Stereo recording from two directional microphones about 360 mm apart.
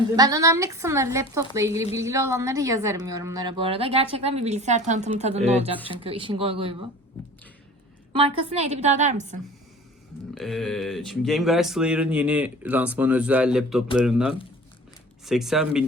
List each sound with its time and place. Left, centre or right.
0.2 s a woman's voice: centre
8.1 s a woman's voice: centre
10.3 s speech: centre